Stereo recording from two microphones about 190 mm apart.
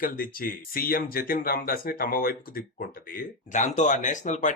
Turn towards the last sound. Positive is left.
turn(degrees=40)  # may be behind; listen again after turning